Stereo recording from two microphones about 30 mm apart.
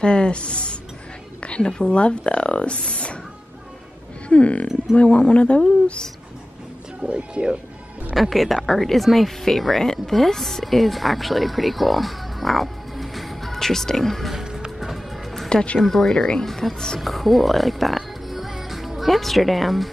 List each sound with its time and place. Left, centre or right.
0.0 s speech: left
1.4 s a sound: left
1.8 s speech: left
4.3 s speech: left
7.1 s speech: right
8.2 s a woman's voice: centre
13.5 s speech: centre
14.3 s music: right
15.5 s speech: left
15.8 s speech: centre